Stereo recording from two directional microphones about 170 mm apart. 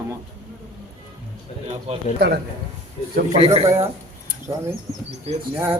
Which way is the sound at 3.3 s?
35° right (ahead or behind).